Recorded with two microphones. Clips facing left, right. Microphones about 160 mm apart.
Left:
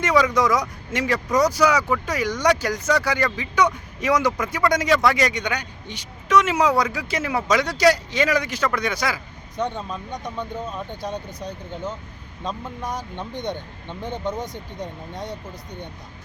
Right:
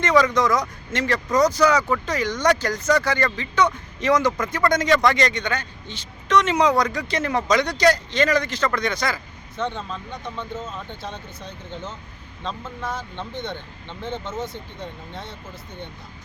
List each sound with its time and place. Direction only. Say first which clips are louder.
0.0 s speech: right 1 dB; 10° left (ahead or behind)